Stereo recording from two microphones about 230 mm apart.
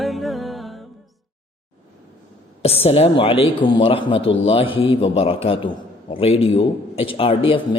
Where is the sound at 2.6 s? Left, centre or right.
Left.